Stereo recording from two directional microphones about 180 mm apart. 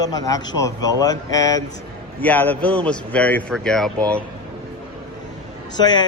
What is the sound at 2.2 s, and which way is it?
A man's voice, 10° left (ahead or behind).